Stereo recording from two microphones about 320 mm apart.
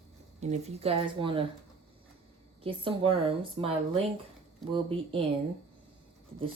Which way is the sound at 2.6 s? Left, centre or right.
Centre.